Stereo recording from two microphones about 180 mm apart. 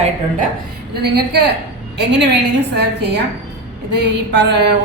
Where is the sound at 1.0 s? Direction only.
65° right (ahead or behind).